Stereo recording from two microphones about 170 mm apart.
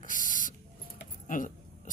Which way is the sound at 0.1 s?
50° left (ahead or behind).